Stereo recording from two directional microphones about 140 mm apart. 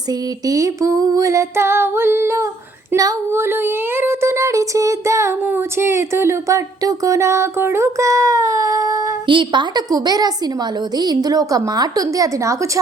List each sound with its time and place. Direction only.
0.1 s child singing: 25° right (ahead or behind)
9.2 s child singing: 35° right (ahead or behind)